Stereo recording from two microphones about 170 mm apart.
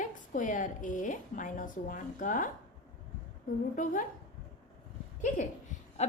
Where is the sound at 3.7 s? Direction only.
50° left (ahead or behind).